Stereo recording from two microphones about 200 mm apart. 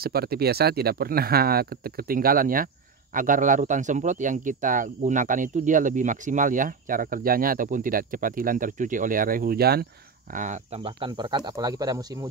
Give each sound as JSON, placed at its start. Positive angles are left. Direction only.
{"t": 0.0, "sound": "speech", "side_deg": -50}
{"t": 10.3, "sound": "speech", "side_deg": -40}
{"t": 10.8, "sound": "speech", "side_deg": -25}